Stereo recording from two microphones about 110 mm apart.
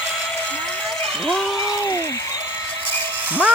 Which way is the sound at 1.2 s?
Centre (ahead or behind).